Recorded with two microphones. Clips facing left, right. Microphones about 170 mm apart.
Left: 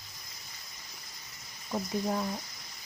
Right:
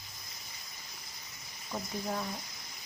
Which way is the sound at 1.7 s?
15° left (ahead or behind).